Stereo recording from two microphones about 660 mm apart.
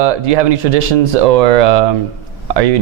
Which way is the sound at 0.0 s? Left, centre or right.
Right.